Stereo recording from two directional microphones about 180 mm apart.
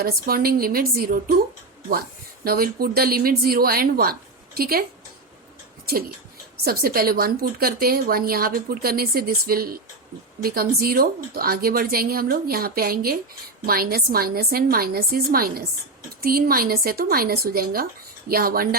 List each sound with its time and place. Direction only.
0.0 s a woman's voice: 55° right (ahead or behind)
6.7 s a woman's voice: 55° right (ahead or behind)